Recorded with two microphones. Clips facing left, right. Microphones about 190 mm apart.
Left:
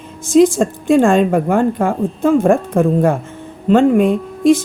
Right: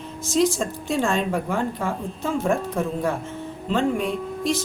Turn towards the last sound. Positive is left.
turn(degrees=55)  # may be behind; listen again after turning